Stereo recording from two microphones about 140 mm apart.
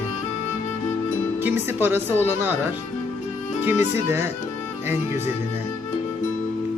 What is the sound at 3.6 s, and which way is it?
Speech, 15° right (ahead or behind).